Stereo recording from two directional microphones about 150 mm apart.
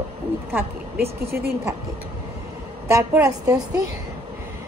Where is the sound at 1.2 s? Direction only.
90° right.